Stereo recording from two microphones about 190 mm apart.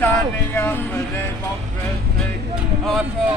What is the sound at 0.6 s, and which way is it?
Speech, 10° left (ahead or behind).